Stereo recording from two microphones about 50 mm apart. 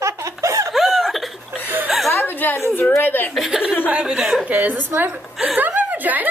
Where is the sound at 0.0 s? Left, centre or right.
Right.